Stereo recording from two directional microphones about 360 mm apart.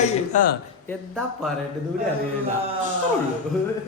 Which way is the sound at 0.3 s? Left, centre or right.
Centre.